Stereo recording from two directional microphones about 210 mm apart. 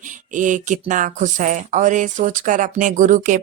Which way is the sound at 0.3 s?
35° right (ahead or behind).